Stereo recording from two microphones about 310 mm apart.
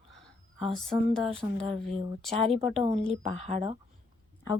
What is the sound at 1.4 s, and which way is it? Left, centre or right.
Speech, centre.